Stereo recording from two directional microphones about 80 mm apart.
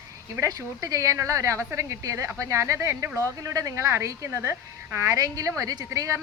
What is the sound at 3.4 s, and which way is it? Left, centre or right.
A woman's voice, right.